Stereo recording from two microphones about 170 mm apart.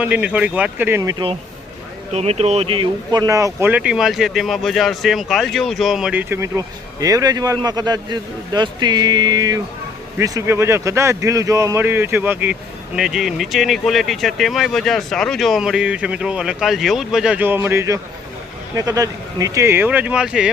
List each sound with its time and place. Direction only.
0.0 s a man's voice: 10° right (ahead or behind)
2.1 s a man's voice: 35° right (ahead or behind); by 20.5 s 5° right (ahead or behind)